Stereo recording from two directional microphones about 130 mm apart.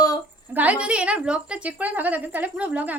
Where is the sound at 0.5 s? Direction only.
10° right (ahead or behind).